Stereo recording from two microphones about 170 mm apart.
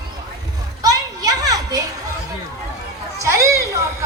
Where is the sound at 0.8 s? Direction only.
20° right (ahead or behind).